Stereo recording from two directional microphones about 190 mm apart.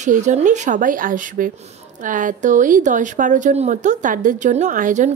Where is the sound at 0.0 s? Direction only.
40° right (ahead or behind).